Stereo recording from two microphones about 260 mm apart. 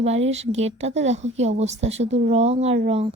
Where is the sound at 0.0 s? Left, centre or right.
Right.